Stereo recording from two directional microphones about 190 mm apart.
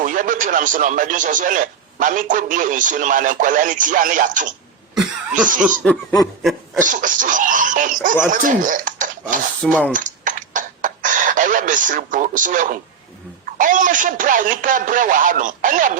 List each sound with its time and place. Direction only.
0.0 s speech: 45° right (ahead or behind)
5.8 s snicker: 5° left (ahead or behind)
6.7 s speech: 45° right (ahead or behind)
9.9 s a sound: 45° right (ahead or behind)
13.4 s speech: 45° right (ahead or behind)